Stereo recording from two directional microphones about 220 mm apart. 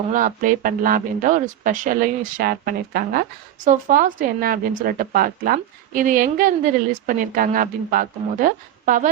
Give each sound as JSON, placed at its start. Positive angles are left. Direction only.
{"t": 0.1, "sound": "speech", "side_deg": -35}